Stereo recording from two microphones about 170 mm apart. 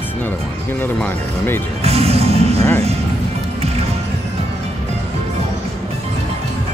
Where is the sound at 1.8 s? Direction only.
35° right (ahead or behind).